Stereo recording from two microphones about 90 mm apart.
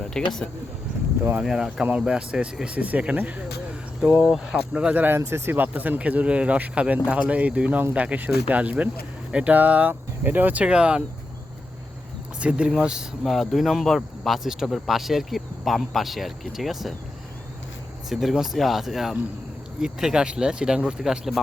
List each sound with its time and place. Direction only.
0.1 s speech: 5° left (ahead or behind)
1.4 s speech: 5° right (ahead or behind)
12.4 s speech: 10° right (ahead or behind)
18.1 s speech: centre (ahead or behind)